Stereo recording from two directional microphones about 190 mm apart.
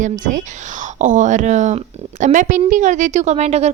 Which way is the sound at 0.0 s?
45° right (ahead or behind).